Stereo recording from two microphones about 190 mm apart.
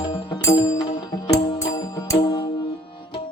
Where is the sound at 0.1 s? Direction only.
25° left (ahead or behind).